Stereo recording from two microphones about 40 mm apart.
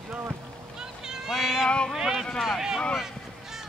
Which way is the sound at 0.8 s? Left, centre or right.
Centre.